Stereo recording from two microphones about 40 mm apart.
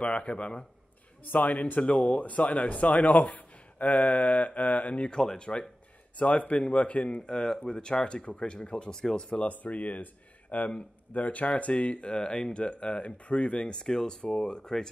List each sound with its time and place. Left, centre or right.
0.0 s speech: left
1.2 s speech: left
5.1 s speech: centre
5.4 s speech: left
7.2 s speech: centre
9.5 s speech: left; by 14.9 s centre